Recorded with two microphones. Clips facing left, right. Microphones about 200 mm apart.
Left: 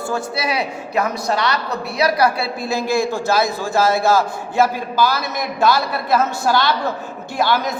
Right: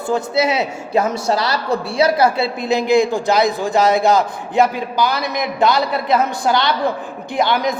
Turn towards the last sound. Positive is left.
turn(degrees=-20)  # may be behind; listen again after turning